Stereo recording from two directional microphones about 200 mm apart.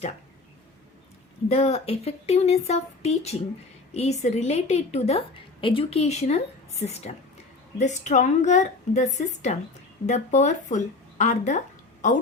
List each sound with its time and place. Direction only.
1.5 s a woman's voice: 30° left (ahead or behind)